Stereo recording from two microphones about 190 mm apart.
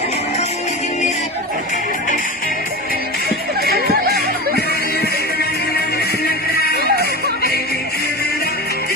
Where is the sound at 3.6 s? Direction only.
55° right (ahead or behind).